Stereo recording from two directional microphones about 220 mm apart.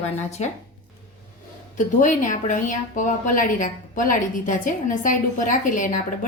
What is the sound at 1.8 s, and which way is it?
Speech, 35° left (ahead or behind).